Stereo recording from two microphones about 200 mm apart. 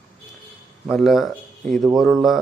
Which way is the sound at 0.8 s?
Centre (ahead or behind).